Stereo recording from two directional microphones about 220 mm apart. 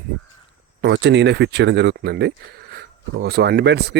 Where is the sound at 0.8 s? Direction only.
50° right (ahead or behind).